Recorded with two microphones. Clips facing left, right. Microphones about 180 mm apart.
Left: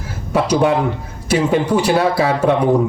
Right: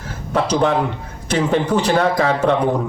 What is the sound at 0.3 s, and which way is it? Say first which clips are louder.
A man's voice: left 2 dB; 10° left (ahead or behind).